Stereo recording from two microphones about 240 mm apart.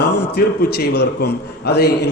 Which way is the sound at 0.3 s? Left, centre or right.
Left.